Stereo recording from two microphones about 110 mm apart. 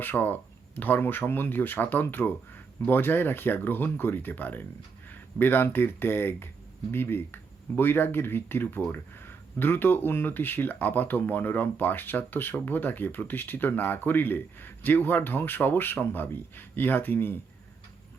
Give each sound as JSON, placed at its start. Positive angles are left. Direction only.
{"t": 0.0, "sound": "speech", "side_deg": 15}